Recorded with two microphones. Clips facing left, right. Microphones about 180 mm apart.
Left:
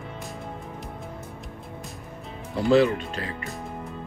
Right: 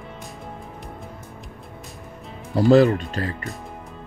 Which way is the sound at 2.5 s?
40° right (ahead or behind).